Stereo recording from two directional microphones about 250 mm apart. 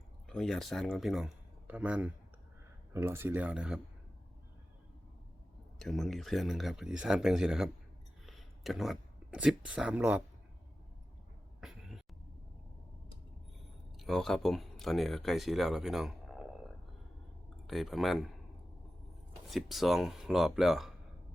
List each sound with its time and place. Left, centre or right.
0.3 s speech: centre
5.8 s speech: centre
11.6 s a sound: centre
13.9 s speech: centre
17.7 s speech: centre
19.5 s speech: centre